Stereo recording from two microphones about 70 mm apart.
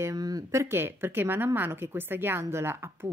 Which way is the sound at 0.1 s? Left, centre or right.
Right.